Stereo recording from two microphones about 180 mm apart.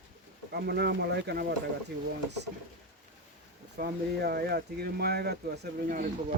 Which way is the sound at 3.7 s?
60° right (ahead or behind).